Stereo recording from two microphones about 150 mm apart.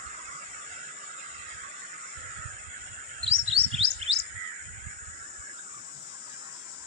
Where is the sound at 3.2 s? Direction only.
40° right (ahead or behind).